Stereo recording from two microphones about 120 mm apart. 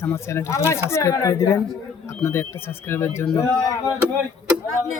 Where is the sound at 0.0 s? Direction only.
20° left (ahead or behind).